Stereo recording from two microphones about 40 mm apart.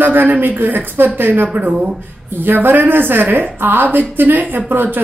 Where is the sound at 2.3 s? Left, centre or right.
Right.